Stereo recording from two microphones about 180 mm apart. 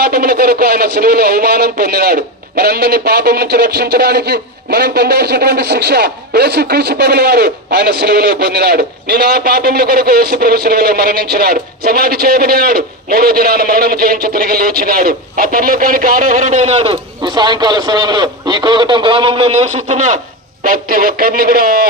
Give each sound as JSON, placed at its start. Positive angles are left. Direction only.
{"t": 0.0, "sound": "speech", "side_deg": -60}
{"t": 20.7, "sound": "speech", "side_deg": -50}